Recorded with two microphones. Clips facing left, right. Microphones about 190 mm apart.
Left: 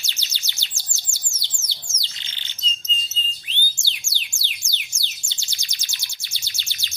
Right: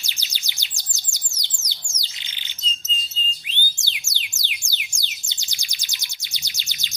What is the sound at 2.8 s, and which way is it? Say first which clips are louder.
Music: even; 15° right (ahead or behind).